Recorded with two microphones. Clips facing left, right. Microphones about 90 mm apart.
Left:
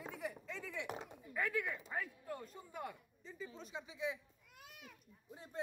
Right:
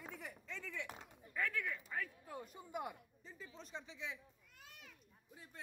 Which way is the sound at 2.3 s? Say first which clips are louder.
Left 1 dB; 10° right (ahead or behind).